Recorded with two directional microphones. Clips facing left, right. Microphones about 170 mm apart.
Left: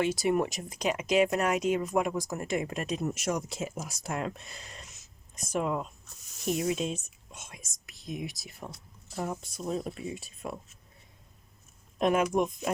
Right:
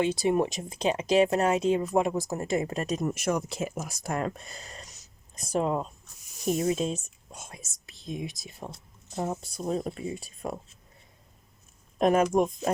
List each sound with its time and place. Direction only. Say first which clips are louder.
0.0 s speech: right 2 dB; 25° right (ahead or behind)
9.6 s speech: right 3 dB; 50° right (ahead or behind)
11.9 s speech: right 3 dB; 40° right (ahead or behind)